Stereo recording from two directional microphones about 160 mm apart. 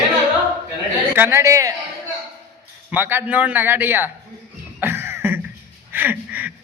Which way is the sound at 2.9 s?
15° right (ahead or behind).